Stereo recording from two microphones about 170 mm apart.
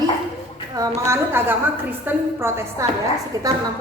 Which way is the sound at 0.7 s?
20° right (ahead or behind).